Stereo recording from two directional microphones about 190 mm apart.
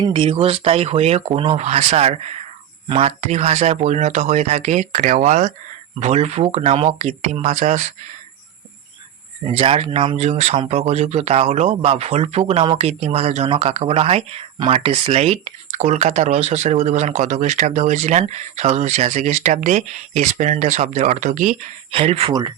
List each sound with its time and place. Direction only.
0.0 s speech: 25° right (ahead or behind)
9.5 s speech: 30° right (ahead or behind)
21.9 s speech: 30° right (ahead or behind)